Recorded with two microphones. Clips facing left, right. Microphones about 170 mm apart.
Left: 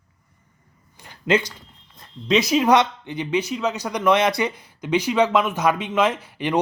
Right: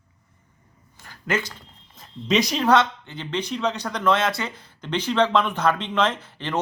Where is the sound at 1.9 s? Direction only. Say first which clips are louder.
Left 2 dB; centre (ahead or behind).